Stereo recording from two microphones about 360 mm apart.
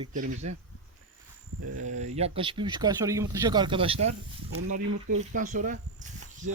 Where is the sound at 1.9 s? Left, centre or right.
Centre.